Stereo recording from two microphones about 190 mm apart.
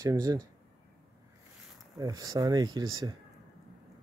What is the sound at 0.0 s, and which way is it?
Speech, 20° right (ahead or behind).